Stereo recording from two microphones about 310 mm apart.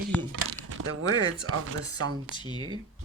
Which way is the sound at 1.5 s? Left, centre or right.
Right.